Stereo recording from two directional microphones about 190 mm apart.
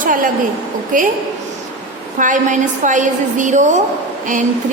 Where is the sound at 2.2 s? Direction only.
40° right (ahead or behind).